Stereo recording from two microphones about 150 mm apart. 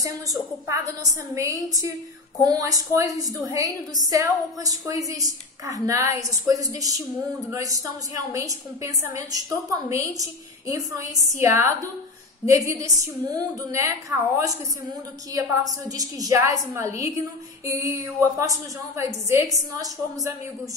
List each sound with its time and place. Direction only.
0.0 s a woman's voice: 20° right (ahead or behind)